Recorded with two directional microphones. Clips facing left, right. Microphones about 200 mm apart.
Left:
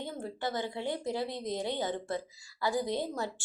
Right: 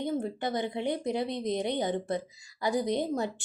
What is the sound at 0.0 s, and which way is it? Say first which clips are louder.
A woman's voice: right 6 dB; 20° right (ahead or behind).